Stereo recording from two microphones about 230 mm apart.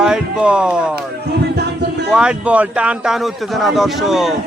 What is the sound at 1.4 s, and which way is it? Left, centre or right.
Music, right.